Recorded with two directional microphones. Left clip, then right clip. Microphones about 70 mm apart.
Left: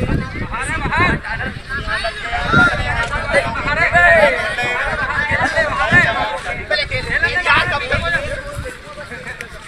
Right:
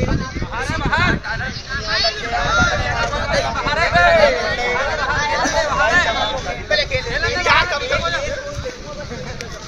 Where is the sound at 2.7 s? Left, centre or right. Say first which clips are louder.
Even; right.